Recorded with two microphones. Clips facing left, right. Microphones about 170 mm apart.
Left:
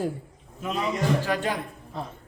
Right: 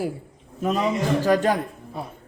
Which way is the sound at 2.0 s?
10° right (ahead or behind).